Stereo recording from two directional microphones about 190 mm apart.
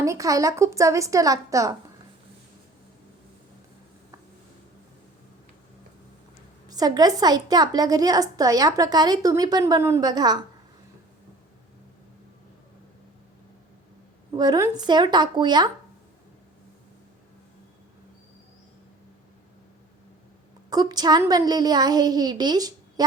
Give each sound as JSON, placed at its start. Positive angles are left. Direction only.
{"t": 0.0, "sound": "a woman's voice", "side_deg": -15}
{"t": 6.7, "sound": "a woman's voice", "side_deg": -20}
{"t": 14.3, "sound": "a woman's voice", "side_deg": -20}
{"t": 20.7, "sound": "a woman's voice", "side_deg": -20}